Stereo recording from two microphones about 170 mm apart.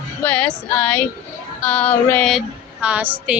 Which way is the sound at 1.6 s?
10° left (ahead or behind).